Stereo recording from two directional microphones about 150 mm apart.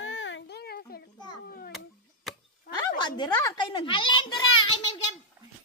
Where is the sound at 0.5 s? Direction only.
90° left.